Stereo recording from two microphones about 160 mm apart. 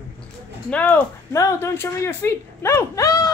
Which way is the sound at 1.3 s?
20° left (ahead or behind).